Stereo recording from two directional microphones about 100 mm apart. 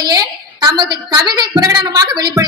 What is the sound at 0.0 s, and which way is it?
A woman's voice, 40° right (ahead or behind).